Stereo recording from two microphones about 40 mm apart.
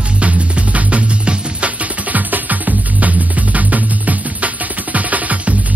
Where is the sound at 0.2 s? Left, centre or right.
Right.